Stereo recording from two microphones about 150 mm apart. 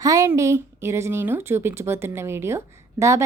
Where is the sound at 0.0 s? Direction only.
20° right (ahead or behind).